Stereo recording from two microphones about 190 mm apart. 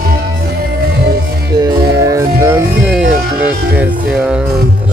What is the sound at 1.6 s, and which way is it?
Music, 15° right (ahead or behind).